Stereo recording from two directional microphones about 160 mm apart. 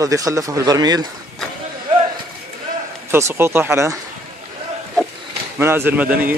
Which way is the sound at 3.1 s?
15° right (ahead or behind).